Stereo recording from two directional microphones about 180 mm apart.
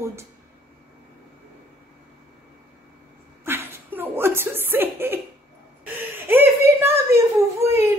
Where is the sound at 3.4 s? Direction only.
10° right (ahead or behind).